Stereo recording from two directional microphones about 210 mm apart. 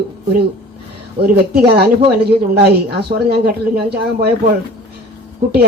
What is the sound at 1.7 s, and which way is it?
Speech, 50° right (ahead or behind).